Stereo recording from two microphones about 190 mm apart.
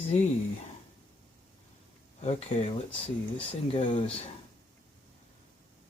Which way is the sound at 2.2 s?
35° left (ahead or behind).